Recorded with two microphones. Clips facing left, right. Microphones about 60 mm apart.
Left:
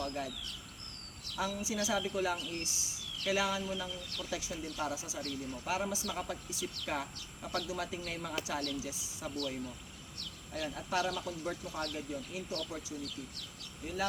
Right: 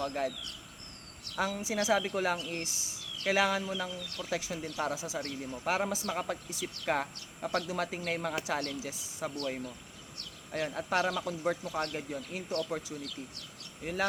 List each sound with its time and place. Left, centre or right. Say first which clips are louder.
0.0 s speech: right 5 dB; right
1.6 s speech: right 7 dB; right
13.8 s speech: right 4 dB; right